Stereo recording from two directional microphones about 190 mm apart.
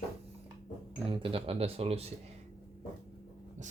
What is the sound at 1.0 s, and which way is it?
Speech, 30° right (ahead or behind).